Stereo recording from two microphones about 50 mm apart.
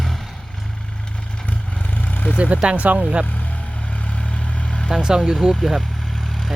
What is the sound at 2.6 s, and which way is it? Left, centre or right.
Speech, right.